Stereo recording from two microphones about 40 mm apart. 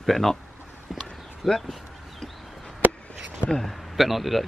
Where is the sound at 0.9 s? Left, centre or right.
Centre.